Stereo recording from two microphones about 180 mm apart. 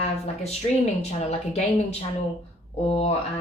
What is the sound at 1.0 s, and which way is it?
Speech, 40° left (ahead or behind).